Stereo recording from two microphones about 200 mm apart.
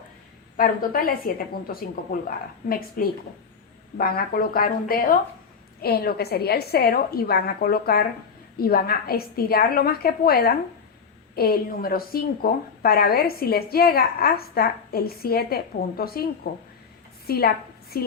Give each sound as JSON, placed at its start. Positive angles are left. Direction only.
{"t": 0.5, "sound": "a woman's voice", "side_deg": 45}
{"t": 17.2, "sound": "a woman's voice", "side_deg": 50}